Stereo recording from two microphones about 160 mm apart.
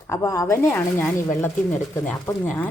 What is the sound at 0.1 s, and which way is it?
A woman's voice, 20° left (ahead or behind).